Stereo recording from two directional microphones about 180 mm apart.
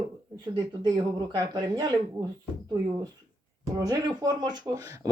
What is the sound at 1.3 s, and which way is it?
Speech, 25° right (ahead or behind).